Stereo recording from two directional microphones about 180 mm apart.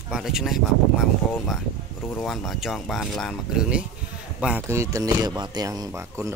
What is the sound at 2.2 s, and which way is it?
Speech, centre (ahead or behind).